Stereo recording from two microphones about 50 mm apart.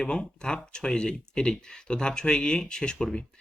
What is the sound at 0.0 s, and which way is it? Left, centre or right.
Speech, centre.